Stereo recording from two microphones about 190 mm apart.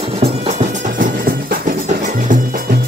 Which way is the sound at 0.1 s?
35° right (ahead or behind).